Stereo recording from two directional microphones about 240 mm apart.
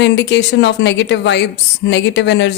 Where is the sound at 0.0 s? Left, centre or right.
Left.